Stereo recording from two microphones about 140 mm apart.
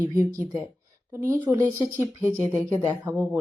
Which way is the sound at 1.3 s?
20° right (ahead or behind).